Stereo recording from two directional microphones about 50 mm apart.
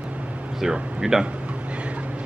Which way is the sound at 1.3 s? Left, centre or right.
Right.